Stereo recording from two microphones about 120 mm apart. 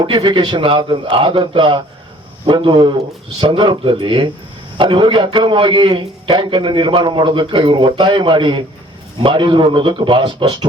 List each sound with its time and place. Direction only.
0.0 s a man's voice: 40° right (ahead or behind)